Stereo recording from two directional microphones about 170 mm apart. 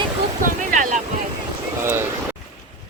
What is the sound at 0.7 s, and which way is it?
Speech, 50° right (ahead or behind).